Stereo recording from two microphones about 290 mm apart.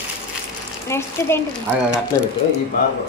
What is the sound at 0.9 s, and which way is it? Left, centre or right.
Speech, centre.